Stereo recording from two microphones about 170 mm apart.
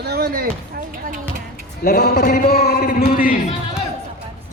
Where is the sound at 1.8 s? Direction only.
60° left (ahead or behind).